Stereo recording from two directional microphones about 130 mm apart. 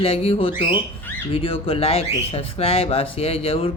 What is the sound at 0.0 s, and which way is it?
Speech, 45° left (ahead or behind).